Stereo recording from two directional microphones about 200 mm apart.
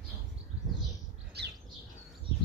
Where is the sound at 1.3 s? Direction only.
55° right (ahead or behind).